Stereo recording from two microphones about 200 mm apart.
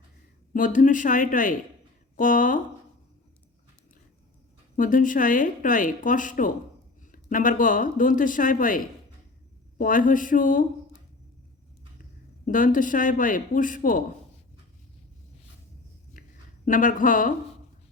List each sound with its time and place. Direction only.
0.5 s speech: 40° left (ahead or behind)
4.8 s speech: 40° left (ahead or behind)
12.5 s speech: 45° left (ahead or behind)
16.2 s a sound: 45° left (ahead or behind)
16.6 s speech: 40° left (ahead or behind)